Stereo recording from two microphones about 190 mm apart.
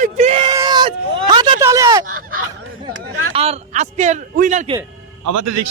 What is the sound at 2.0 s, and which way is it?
Honk, 50° right (ahead or behind).